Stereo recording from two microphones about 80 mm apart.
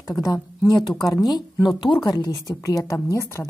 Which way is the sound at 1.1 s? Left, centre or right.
Left.